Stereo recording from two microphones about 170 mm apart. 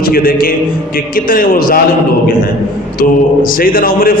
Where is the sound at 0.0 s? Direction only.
60° left (ahead or behind).